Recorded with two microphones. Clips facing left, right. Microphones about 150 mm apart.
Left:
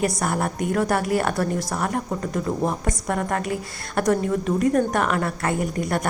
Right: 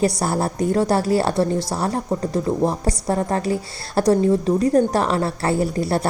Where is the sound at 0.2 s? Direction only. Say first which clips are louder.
Right 3 dB; 30° right (ahead or behind).